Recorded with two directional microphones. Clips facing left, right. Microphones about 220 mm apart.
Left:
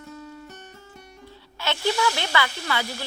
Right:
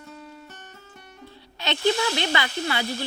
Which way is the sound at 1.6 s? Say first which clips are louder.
Right 1 dB; 20° right (ahead or behind).